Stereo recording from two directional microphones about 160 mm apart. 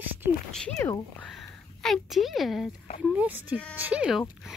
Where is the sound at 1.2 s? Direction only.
5° left (ahead or behind).